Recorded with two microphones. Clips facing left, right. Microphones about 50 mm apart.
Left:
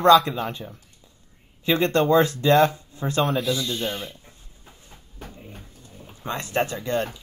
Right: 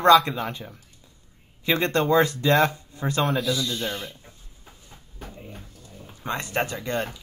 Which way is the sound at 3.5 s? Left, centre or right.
Left.